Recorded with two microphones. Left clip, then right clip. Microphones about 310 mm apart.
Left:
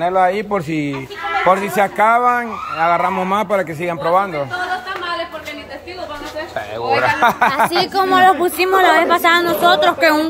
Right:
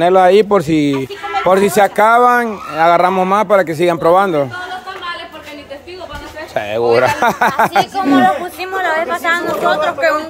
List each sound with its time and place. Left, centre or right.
0.0 s a man's voice: right
6.5 s a man's voice: right
8.2 s speech: left